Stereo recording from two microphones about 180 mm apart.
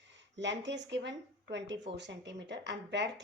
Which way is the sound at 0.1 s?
80° right.